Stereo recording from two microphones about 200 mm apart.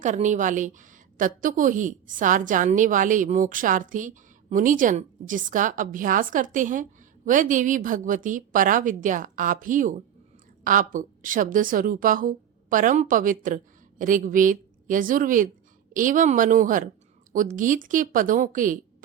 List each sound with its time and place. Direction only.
0.0 s a woman's voice: 35° right (ahead or behind)